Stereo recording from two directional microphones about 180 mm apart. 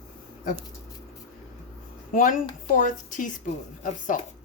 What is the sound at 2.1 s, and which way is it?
Speech, 50° left (ahead or behind).